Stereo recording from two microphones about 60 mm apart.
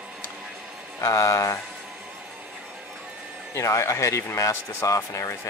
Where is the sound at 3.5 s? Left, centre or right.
Left.